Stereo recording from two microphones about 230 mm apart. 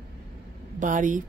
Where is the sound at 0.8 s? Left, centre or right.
Right.